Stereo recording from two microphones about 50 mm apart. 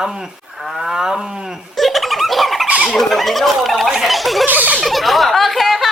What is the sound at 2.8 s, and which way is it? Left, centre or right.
A woman's voice, centre.